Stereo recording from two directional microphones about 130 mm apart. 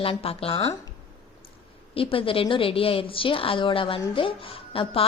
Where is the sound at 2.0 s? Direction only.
45° left (ahead or behind).